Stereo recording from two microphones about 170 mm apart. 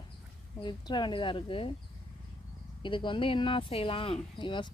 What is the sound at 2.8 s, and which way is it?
Speech, 30° left (ahead or behind).